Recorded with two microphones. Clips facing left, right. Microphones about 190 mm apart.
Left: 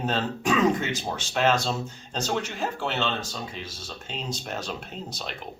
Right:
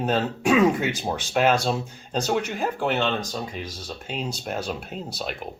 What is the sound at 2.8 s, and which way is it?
Speech, 50° right (ahead or behind).